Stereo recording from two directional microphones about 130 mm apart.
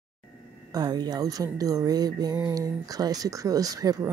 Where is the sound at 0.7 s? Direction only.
30° right (ahead or behind).